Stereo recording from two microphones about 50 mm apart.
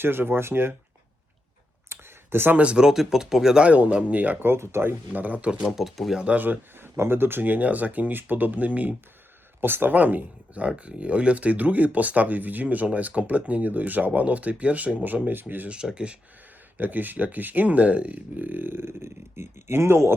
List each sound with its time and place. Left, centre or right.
0.0 s speech: right
1.9 s a sound: right
2.7 s speech: centre
3.7 s speech: right
4.4 s speech: right
5.1 s speech: right
5.6 s speech: centre
6.3 s speech: right
6.7 s speech: right
9.6 s speech: right
15.7 s speech: centre
16.7 s speech: right